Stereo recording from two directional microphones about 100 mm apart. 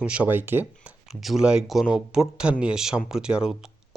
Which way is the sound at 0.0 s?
15° right (ahead or behind).